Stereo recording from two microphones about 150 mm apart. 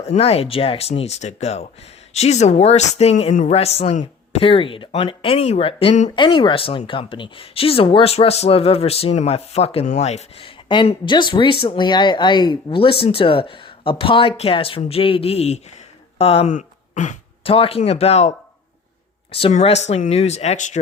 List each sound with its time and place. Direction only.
0.0 s speech: 40° left (ahead or behind)
6.1 s speech: 30° left (ahead or behind)
9.8 s speech: 50° left (ahead or behind)
17.4 s speech: 40° left (ahead or behind)